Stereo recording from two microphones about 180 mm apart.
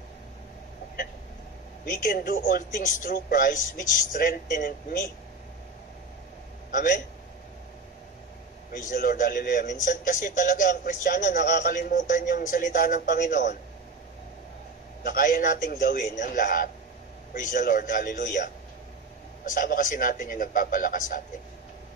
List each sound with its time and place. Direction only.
2.0 s a man's voice: 55° left (ahead or behind)
6.7 s a man's voice: 50° left (ahead or behind)
8.9 s a man's voice: 50° left (ahead or behind)
15.0 s a man's voice: 50° left (ahead or behind)
19.5 s a man's voice: 50° left (ahead or behind)